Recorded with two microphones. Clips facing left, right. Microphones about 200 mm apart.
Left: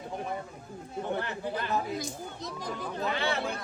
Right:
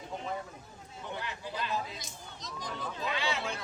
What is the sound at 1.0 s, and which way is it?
Chatter, 55° left (ahead or behind).